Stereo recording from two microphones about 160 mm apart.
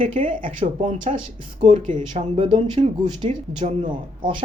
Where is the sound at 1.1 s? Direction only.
45° right (ahead or behind).